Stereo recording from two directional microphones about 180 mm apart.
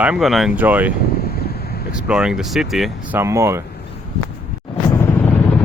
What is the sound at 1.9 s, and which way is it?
Speech, 5° right (ahead or behind).